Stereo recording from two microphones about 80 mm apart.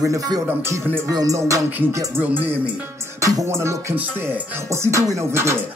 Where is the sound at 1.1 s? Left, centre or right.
Right.